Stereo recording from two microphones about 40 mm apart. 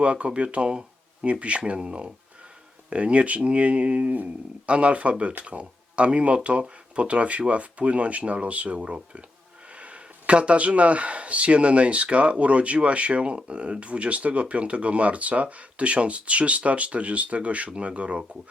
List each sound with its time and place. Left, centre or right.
0.0 s speech: right